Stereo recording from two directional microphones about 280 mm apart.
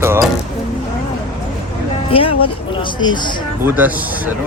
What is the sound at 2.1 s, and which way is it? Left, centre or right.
Speech, centre.